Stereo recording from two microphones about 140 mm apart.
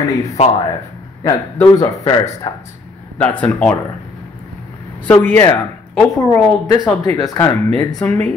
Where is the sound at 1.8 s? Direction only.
30° left (ahead or behind).